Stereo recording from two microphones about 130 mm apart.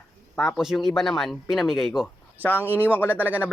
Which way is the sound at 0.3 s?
Centre (ahead or behind).